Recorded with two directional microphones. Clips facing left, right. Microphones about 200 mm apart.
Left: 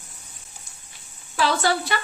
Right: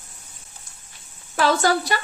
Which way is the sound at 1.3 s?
45° right (ahead or behind).